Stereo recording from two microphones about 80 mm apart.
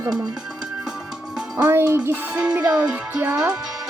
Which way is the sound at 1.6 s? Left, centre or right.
Right.